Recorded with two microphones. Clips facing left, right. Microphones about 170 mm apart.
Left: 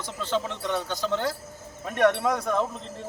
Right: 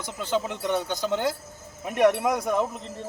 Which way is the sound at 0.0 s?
15° right (ahead or behind).